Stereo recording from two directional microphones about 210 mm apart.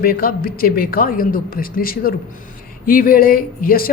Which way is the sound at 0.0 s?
45° left (ahead or behind).